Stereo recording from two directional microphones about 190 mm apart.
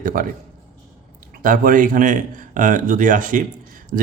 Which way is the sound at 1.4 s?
45° right (ahead or behind).